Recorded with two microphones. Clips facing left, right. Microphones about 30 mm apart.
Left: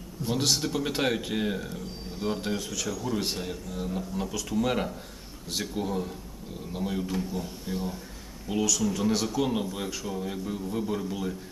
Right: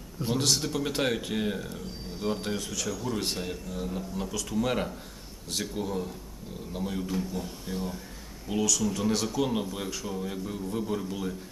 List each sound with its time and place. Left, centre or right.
0.3 s speech: centre